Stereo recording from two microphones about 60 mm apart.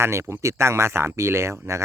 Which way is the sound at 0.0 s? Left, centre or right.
Right.